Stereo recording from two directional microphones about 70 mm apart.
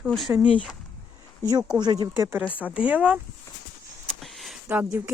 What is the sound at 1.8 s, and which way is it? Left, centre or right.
Speech, right.